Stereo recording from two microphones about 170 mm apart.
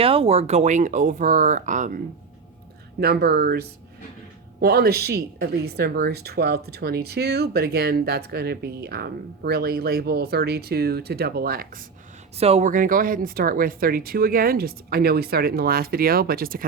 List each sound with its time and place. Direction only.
0.0 s speech: 35° right (ahead or behind)
3.0 s speech: 65° right (ahead or behind)
12.4 s speech: 40° right (ahead or behind); by 16.6 s 60° right (ahead or behind)